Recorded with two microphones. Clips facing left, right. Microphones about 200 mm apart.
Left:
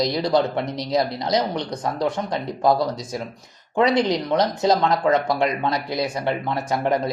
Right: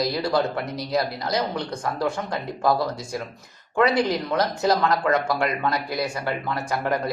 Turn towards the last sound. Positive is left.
turn(degrees=20)  # may be behind; listen again after turning